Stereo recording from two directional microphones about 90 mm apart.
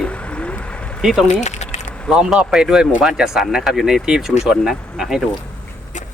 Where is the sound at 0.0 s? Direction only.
15° left (ahead or behind).